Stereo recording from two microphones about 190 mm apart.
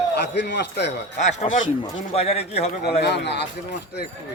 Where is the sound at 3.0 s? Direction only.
65° left (ahead or behind).